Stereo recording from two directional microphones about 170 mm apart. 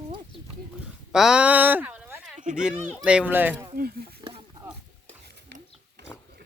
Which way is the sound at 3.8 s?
65° right (ahead or behind).